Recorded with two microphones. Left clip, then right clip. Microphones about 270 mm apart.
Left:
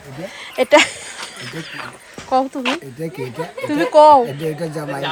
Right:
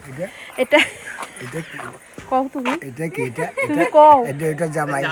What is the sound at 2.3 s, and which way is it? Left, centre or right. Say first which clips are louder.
Speech: left 2 dB; centre.